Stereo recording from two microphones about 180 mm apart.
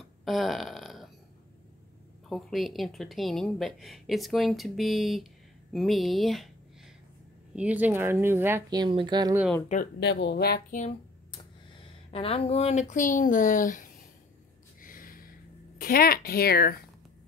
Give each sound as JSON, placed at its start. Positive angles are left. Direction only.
{"t": 0.2, "sound": "a sound", "side_deg": 0}
{"t": 2.2, "sound": "speech", "side_deg": 0}
{"t": 7.5, "sound": "a woman's voice", "side_deg": -10}
{"t": 8.6, "sound": "speech", "side_deg": -25}
{"t": 9.9, "sound": "speech", "side_deg": 70}
{"t": 10.8, "sound": "speech", "side_deg": 30}
{"t": 14.8, "sound": "a sound", "side_deg": 50}
{"t": 15.8, "sound": "speech", "side_deg": 55}